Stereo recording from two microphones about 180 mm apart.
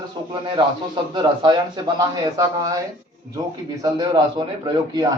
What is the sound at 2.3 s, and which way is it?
Speech, 20° right (ahead or behind).